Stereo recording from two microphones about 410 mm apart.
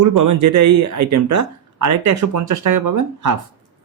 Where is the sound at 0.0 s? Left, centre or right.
Right.